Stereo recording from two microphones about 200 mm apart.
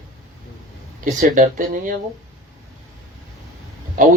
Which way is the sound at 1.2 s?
40° right (ahead or behind).